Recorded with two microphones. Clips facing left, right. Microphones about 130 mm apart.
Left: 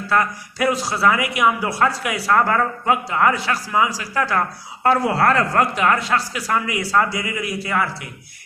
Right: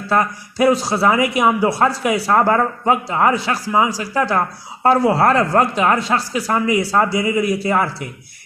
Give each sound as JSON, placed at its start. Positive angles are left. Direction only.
{"t": 0.1, "sound": "speech", "side_deg": -30}